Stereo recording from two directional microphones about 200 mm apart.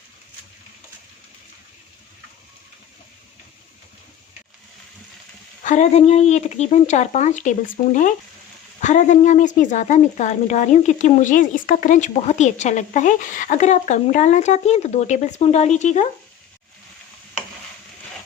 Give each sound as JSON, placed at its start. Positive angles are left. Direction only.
{"t": 5.6, "sound": "speech", "side_deg": 35}